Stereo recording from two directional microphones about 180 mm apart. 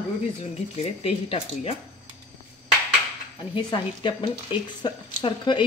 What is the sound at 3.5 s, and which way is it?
Speech, 25° left (ahead or behind).